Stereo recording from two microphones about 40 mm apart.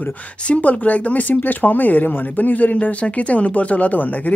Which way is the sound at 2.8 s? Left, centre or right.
Left.